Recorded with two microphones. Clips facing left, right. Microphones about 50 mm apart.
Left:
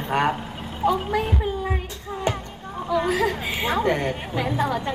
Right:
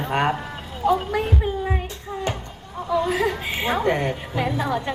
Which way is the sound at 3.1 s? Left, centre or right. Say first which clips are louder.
Even; centre.